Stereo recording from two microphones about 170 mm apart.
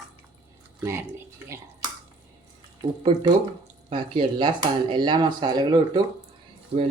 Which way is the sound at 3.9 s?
30° right (ahead or behind).